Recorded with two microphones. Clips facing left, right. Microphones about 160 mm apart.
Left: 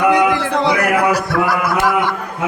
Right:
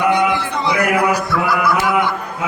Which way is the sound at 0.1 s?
90° left.